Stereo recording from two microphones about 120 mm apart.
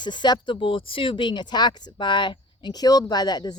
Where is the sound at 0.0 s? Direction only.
40° left (ahead or behind).